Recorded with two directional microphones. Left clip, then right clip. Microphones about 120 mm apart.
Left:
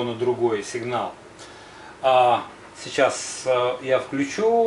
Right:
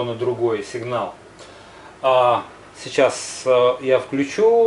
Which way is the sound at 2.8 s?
20° right (ahead or behind).